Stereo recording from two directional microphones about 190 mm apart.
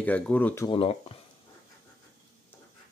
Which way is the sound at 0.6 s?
30° left (ahead or behind).